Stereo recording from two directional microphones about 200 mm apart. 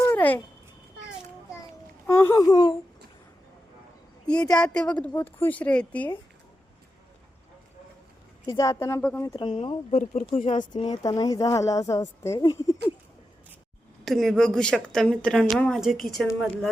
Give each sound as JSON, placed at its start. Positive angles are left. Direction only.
{"t": 0.0, "sound": "a sound", "side_deg": 10}
{"t": 2.0, "sound": "a woman's voice", "side_deg": 10}
{"t": 4.3, "sound": "a woman's voice", "side_deg": 5}
{"t": 8.4, "sound": "a woman's voice", "side_deg": 15}
{"t": 9.2, "sound": "speech", "side_deg": 25}
{"t": 11.0, "sound": "a woman's voice", "side_deg": 20}
{"t": 14.0, "sound": "speech", "side_deg": 0}